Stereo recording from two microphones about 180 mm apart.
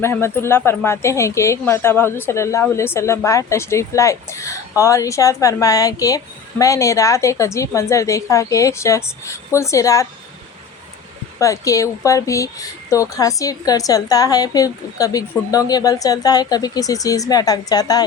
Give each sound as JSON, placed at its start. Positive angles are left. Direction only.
{"t": 0.0, "sound": "a woman's voice", "side_deg": 15}
{"t": 11.3, "sound": "speech", "side_deg": 20}